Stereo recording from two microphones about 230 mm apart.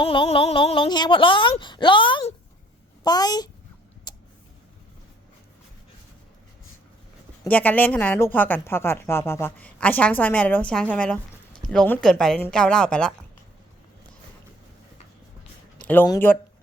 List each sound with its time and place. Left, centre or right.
0.0 s speech: left
4.1 s a sound: centre
7.4 s speech: centre
15.8 s speech: centre